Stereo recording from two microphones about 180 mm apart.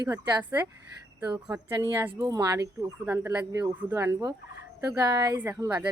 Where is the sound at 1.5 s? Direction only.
10° right (ahead or behind).